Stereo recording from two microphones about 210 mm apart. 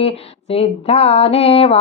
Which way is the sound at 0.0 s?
30° left (ahead or behind).